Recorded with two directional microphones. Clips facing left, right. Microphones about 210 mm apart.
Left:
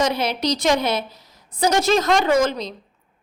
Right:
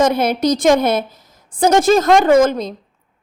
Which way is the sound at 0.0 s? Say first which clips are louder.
Right 6 dB; 50° right (ahead or behind).